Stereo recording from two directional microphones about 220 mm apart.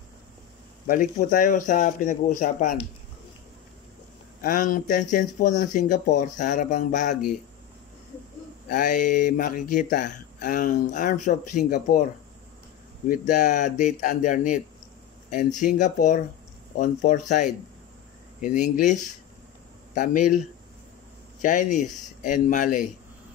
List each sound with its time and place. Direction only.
0.8 s speech: 40° left (ahead or behind)
4.4 s speech: 35° left (ahead or behind)
8.6 s speech: 35° left (ahead or behind)
13.1 s speech: 35° left (ahead or behind)